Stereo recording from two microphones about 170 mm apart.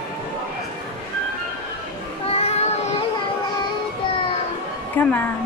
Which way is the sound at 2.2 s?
35° left (ahead or behind).